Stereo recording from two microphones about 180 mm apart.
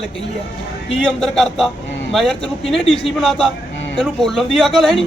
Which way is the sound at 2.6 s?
30° left (ahead or behind).